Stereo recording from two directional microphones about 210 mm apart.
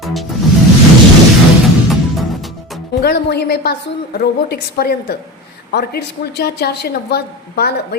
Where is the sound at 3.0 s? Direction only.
50° left (ahead or behind).